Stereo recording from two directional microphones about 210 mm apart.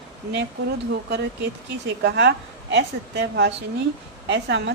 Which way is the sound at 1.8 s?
55° right (ahead or behind).